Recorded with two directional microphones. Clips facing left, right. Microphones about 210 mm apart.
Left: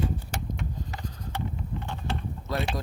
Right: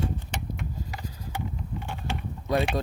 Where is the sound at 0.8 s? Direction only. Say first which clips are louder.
Even; 10° right (ahead or behind).